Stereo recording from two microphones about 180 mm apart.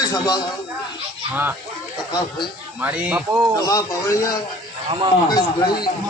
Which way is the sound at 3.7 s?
20° left (ahead or behind).